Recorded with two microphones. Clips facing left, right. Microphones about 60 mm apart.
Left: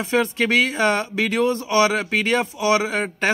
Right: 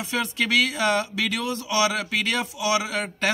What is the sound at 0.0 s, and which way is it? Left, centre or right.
Speech, left.